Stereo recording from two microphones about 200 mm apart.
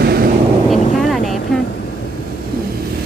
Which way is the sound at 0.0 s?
50° right (ahead or behind).